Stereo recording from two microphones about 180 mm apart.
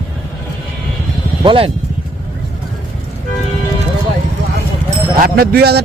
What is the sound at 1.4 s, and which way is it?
Speech, 30° right (ahead or behind).